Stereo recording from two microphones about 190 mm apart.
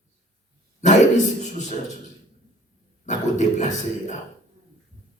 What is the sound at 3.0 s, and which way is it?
A man's voice, 40° left (ahead or behind).